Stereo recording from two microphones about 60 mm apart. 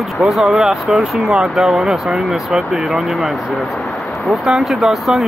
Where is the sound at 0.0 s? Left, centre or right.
Centre.